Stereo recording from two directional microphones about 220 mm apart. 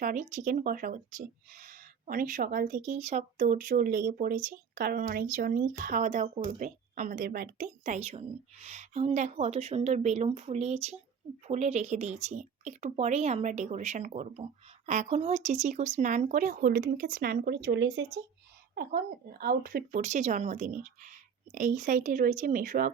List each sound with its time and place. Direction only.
0.0 s speech: 35° right (ahead or behind); by 18.2 s 55° right (ahead or behind)
18.7 s speech: 45° right (ahead or behind)